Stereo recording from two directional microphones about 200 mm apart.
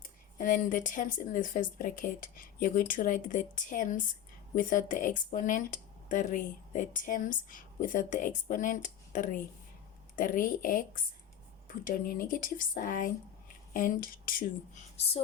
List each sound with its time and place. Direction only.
0.3 s speech: 40° left (ahead or behind)